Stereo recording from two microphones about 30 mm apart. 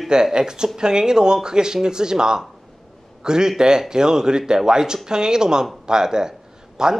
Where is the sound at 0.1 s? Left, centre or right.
Right.